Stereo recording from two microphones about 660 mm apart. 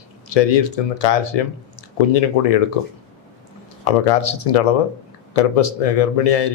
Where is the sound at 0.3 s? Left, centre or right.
Left.